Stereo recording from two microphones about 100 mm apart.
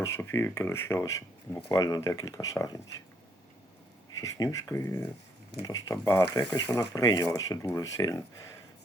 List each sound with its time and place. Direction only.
0.0 s speech: 25° left (ahead or behind)
4.2 s speech: 35° left (ahead or behind)